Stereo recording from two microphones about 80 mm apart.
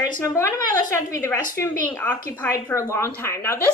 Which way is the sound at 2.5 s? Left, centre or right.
Left.